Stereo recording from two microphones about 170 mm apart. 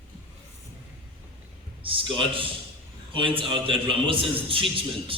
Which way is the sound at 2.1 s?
30° right (ahead or behind).